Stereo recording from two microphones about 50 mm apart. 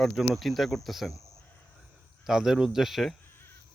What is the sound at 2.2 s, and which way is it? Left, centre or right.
Speech, centre.